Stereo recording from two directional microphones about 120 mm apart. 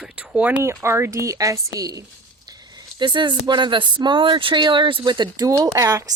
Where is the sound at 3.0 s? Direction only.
40° right (ahead or behind).